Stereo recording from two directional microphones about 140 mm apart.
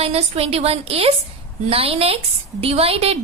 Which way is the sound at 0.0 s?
45° right (ahead or behind).